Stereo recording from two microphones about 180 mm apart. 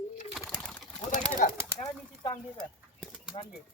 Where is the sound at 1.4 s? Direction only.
45° left (ahead or behind).